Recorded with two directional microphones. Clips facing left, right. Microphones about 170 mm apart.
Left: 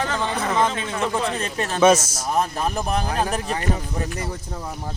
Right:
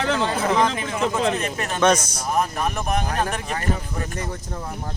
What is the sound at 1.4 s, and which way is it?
Speech, 30° left (ahead or behind).